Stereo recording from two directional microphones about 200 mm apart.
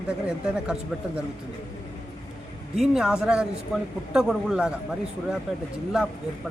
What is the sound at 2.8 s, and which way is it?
Speech, centre (ahead or behind).